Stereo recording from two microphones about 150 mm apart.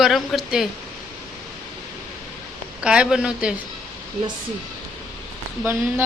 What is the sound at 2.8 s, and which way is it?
Speech, 5° right (ahead or behind).